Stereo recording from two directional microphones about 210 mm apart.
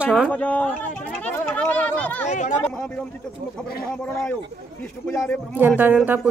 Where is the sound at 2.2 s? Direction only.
35° left (ahead or behind).